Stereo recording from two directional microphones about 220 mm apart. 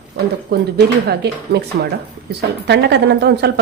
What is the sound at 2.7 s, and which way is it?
Speech, 50° right (ahead or behind).